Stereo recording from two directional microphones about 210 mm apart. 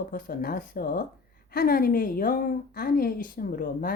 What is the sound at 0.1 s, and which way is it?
A woman's voice, 45° left (ahead or behind).